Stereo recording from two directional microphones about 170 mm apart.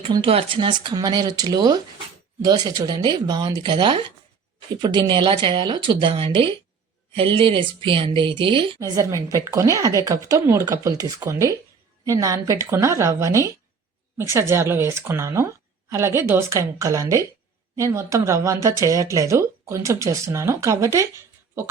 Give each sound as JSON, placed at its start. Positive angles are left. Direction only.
{"t": 0.0, "sound": "speech", "side_deg": -30}
{"t": 8.8, "sound": "speech", "side_deg": -20}